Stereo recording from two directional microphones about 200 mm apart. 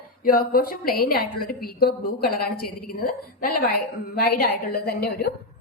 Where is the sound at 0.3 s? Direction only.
45° left (ahead or behind).